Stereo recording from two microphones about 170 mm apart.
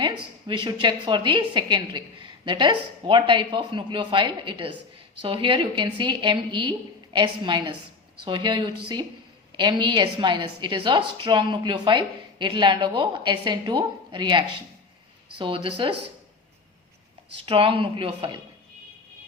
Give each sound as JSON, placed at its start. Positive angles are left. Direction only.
{"t": 0.0, "sound": "a woman's voice", "side_deg": -30}
{"t": 17.3, "sound": "speech", "side_deg": -30}